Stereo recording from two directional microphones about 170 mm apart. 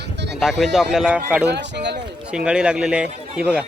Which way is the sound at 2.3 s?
5° right (ahead or behind).